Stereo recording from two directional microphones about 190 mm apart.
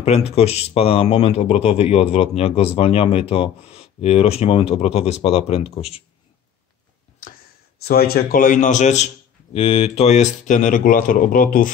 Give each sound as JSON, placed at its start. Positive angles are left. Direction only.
{"t": 0.0, "sound": "speech", "side_deg": 35}
{"t": 7.8, "sound": "speech", "side_deg": 55}